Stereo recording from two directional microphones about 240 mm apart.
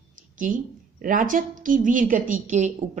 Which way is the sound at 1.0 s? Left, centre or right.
Right.